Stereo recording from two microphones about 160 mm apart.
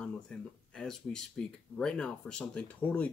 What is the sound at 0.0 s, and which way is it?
Speech, 5° left (ahead or behind).